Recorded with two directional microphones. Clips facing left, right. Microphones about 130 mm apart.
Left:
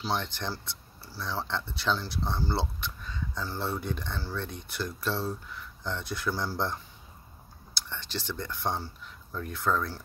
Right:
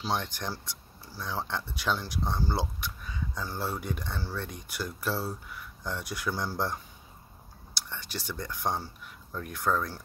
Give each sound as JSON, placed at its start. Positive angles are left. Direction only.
{"t": 0.0, "sound": "speech", "side_deg": -15}